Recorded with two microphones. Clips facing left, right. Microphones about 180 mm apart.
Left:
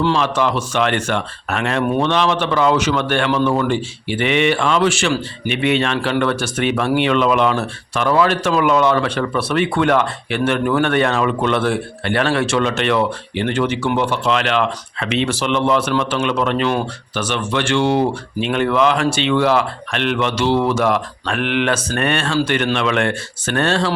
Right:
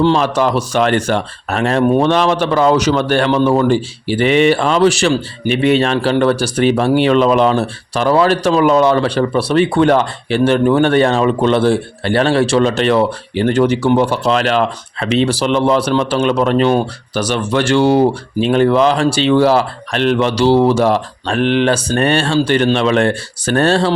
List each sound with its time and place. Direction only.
0.0 s speech: 40° right (ahead or behind)